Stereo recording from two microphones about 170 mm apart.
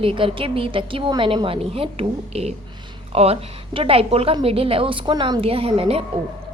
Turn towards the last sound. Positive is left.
turn(degrees=-35)  # may be behind; listen again after turning